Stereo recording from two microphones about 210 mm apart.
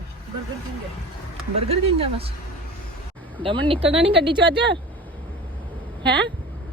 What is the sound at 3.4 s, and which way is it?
Speech, 25° right (ahead or behind).